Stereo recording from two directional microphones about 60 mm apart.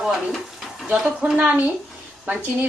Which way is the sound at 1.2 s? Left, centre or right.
Right.